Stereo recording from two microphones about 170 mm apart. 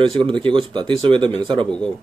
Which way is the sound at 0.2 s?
30° right (ahead or behind).